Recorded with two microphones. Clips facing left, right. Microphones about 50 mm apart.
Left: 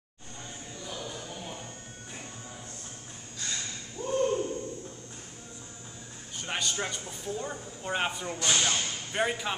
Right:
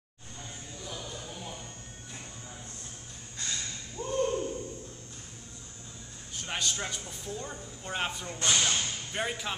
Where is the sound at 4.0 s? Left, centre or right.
Right.